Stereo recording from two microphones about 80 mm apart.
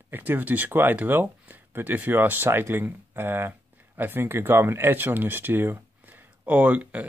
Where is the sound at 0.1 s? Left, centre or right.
Right.